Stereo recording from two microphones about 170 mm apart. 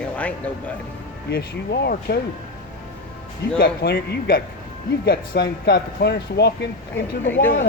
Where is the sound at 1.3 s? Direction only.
75° left (ahead or behind).